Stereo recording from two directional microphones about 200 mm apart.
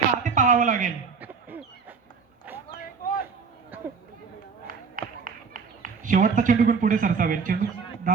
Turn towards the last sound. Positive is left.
turn(degrees=-45)  # may be behind; listen again after turning